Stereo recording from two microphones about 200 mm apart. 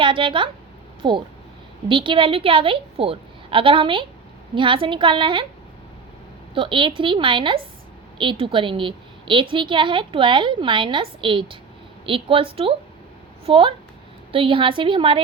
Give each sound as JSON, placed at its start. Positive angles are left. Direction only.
{"t": 0.0, "sound": "a woman's voice", "side_deg": -25}
{"t": 6.5, "sound": "a woman's voice", "side_deg": -25}